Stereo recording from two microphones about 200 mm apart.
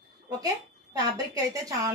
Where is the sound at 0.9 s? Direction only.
20° right (ahead or behind).